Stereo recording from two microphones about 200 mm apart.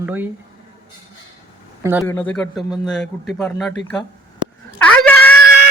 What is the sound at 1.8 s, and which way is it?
Speech, 10° right (ahead or behind).